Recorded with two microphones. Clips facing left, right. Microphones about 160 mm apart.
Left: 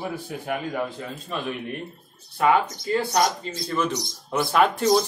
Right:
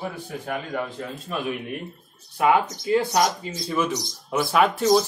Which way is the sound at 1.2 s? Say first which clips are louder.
Right 1 dB; 5° right (ahead or behind).